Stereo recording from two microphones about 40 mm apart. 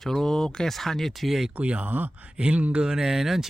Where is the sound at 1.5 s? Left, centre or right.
Right.